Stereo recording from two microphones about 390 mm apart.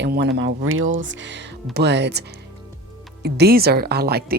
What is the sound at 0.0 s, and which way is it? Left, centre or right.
Speech, right.